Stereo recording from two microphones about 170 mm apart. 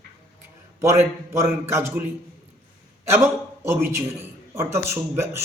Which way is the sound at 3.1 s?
15° right (ahead or behind).